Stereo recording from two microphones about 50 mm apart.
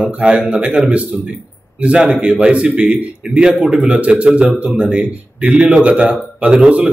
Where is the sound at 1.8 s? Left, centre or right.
Right.